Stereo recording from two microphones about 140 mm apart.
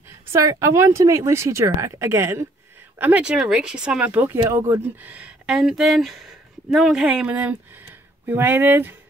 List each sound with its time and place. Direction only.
0.3 s speech: 20° right (ahead or behind)